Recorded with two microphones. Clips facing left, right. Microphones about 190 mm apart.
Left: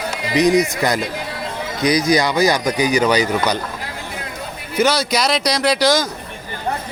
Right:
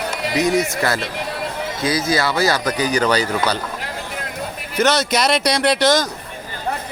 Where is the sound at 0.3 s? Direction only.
20° left (ahead or behind).